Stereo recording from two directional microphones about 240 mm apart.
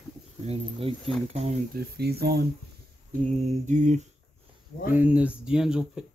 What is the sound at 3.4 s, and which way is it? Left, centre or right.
Mantra, right.